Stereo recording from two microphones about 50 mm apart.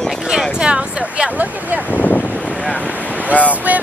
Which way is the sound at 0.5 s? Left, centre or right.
Right.